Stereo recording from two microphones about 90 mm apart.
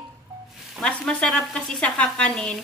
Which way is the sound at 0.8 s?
5° left (ahead or behind).